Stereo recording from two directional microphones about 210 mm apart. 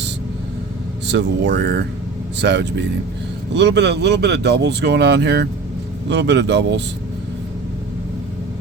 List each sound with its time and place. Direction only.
1.0 s speech: 55° right (ahead or behind)